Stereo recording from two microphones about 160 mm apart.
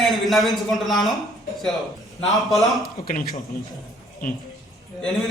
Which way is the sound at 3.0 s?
75° left (ahead or behind).